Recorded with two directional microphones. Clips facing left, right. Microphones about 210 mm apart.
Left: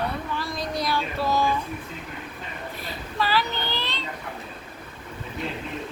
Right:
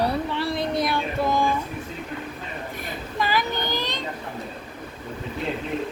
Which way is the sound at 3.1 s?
15° right (ahead or behind).